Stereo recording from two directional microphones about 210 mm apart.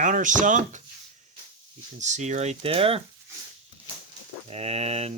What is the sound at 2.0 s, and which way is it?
Speech, 35° right (ahead or behind).